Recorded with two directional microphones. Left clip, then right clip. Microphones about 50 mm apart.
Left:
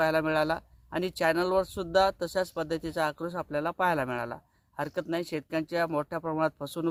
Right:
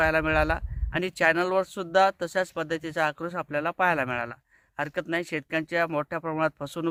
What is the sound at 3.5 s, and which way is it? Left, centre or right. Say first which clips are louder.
Speech: right 3 dB; centre.